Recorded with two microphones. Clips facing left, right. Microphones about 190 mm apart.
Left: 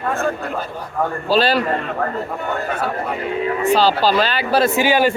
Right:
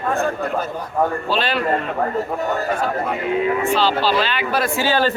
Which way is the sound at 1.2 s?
35° left (ahead or behind).